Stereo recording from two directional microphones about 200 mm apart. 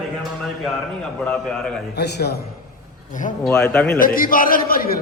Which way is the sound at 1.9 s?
55° left (ahead or behind).